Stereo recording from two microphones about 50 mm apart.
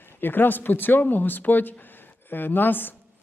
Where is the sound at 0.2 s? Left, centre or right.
Left.